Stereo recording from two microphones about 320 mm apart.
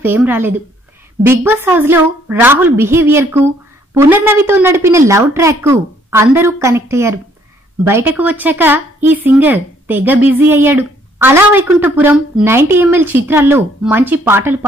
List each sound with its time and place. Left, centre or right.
0.0 s speech: centre